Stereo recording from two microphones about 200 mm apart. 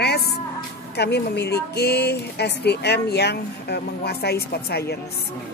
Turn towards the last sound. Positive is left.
turn(degrees=55)  # may be behind; listen again after turning